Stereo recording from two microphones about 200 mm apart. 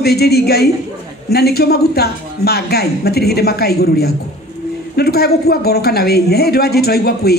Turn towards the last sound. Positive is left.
turn(degrees=50)  # may be behind; listen again after turning